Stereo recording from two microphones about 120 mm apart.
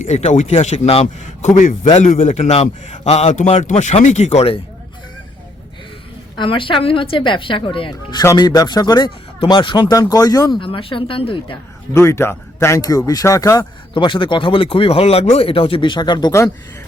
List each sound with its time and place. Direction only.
0.2 s a man's voice: 70° left (ahead or behind)
6.3 s speech: 45° left (ahead or behind)
10.6 s speech: 50° left (ahead or behind)
11.9 s speech: 20° left (ahead or behind)
13.9 s speech: 45° left (ahead or behind)